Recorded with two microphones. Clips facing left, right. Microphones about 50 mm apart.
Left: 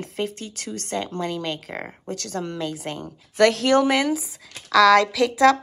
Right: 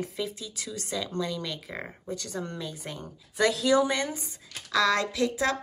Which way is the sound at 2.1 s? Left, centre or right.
Left.